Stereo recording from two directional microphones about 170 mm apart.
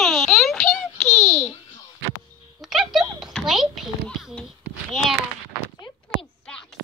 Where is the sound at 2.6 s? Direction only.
Centre (ahead or behind).